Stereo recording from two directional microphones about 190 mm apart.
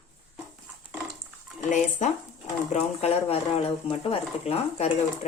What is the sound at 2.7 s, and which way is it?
Speech, 35° left (ahead or behind).